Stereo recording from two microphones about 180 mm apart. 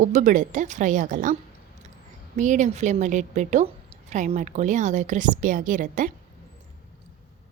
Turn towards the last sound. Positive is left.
turn(degrees=-45)  # may be behind; listen again after turning